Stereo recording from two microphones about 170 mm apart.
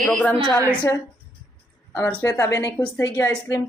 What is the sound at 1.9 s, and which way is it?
Speech, 15° left (ahead or behind).